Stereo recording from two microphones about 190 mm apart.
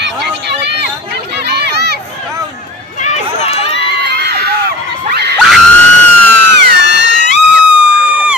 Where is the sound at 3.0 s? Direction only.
35° left (ahead or behind).